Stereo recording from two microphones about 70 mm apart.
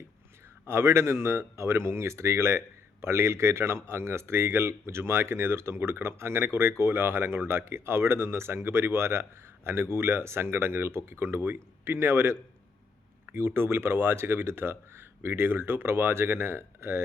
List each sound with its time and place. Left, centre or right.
0.7 s speech: right